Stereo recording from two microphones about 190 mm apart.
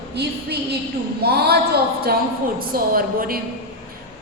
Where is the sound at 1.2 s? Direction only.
55° right (ahead or behind).